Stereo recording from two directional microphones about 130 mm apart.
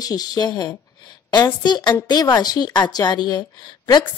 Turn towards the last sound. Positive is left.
turn(degrees=30)  # may be behind; listen again after turning